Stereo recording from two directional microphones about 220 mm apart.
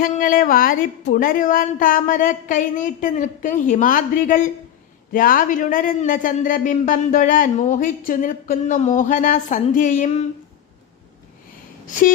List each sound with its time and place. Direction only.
0.0 s a man's voice: 40° left (ahead or behind)
11.9 s a man's voice: 35° left (ahead or behind)